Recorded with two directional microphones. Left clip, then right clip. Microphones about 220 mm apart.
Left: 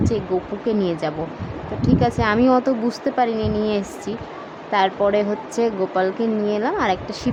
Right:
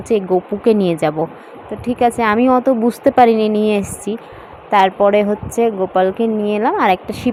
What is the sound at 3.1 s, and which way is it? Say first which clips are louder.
Speech: right 9 dB; 25° right (ahead or behind).